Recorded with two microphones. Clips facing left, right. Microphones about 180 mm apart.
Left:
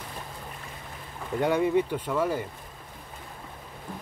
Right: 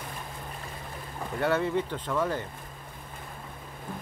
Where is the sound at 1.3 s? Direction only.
15° left (ahead or behind).